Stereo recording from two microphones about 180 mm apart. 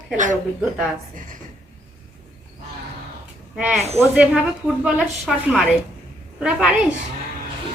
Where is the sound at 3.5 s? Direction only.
5° right (ahead or behind).